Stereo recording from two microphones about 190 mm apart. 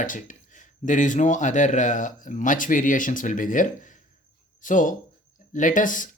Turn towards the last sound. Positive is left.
turn(degrees=45)  # may be behind; listen again after turning